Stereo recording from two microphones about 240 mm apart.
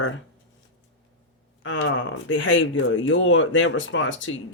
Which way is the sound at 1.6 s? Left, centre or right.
Left.